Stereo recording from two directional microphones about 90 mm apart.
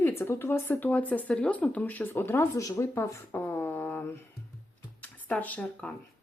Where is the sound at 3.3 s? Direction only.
25° left (ahead or behind).